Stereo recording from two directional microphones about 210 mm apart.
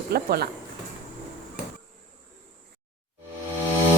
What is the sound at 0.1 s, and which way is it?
Speech, 45° right (ahead or behind).